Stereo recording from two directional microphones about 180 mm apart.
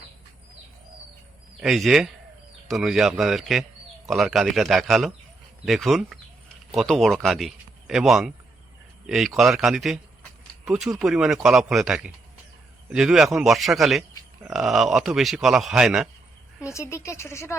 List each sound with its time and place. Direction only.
1.6 s a man's voice: centre (ahead or behind)
16.6 s a woman's voice: 15° left (ahead or behind)